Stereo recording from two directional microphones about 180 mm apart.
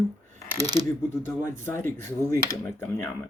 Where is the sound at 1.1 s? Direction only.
15° left (ahead or behind).